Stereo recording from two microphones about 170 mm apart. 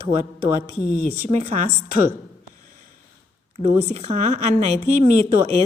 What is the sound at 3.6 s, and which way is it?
A woman's voice, 35° right (ahead or behind).